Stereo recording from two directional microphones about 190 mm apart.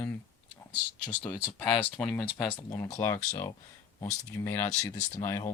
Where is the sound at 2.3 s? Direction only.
10° left (ahead or behind).